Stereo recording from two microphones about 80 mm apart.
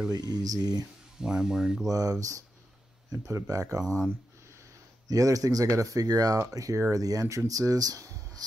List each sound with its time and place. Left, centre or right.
0.1 s speech: right
1.2 s speech: centre
1.9 s speech: right
5.0 s speech: right